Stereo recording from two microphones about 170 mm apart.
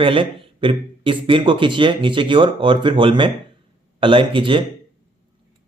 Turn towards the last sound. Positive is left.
turn(degrees=-30)  # may be behind; listen again after turning